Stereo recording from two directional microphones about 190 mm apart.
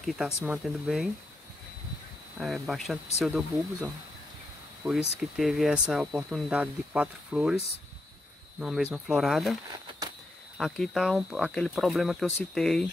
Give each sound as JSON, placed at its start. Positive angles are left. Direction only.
{"t": 0.0, "sound": "speech", "side_deg": 0}
{"t": 2.3, "sound": "speech", "side_deg": 0}
{"t": 8.5, "sound": "speech", "side_deg": -5}
{"t": 9.7, "sound": "a sound", "side_deg": -20}
{"t": 10.6, "sound": "speech", "side_deg": 0}